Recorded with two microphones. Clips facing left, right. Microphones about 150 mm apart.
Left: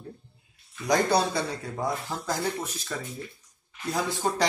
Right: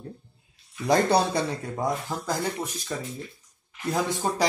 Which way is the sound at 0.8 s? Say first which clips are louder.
Right 2 dB; 25° right (ahead or behind).